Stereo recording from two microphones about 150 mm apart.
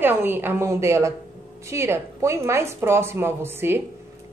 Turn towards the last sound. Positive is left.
turn(degrees=-15)  # may be behind; listen again after turning